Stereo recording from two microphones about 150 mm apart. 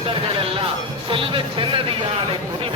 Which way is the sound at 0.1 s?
35° right (ahead or behind).